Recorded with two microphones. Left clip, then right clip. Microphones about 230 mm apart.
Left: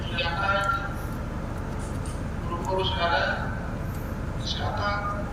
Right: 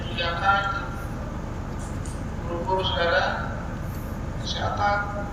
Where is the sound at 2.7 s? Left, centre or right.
Right.